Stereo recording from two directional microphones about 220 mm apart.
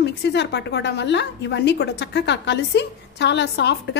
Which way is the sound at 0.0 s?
50° left (ahead or behind).